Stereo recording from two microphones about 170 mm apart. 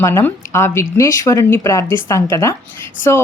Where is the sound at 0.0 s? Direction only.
15° left (ahead or behind).